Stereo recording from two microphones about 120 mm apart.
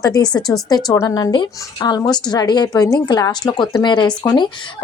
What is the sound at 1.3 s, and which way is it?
Speech, 40° left (ahead or behind).